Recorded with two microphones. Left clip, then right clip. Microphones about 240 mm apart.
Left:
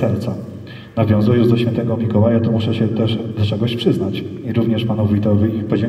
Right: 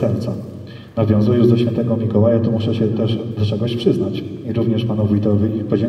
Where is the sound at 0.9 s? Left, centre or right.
Left.